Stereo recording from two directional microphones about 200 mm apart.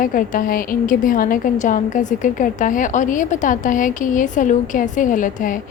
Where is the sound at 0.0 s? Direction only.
45° left (ahead or behind).